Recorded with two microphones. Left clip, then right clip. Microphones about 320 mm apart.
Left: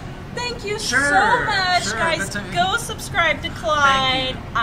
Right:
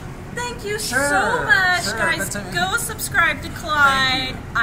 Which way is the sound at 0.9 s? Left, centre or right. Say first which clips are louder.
Left 3 dB; centre.